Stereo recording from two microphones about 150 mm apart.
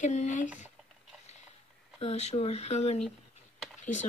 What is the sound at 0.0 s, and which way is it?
Speech, 50° left (ahead or behind).